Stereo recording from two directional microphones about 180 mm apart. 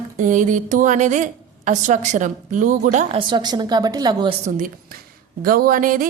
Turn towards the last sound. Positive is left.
turn(degrees=-50)  # may be behind; listen again after turning